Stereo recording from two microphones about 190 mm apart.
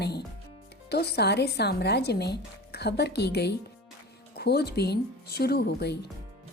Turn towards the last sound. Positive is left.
turn(degrees=60)  # may be behind; listen again after turning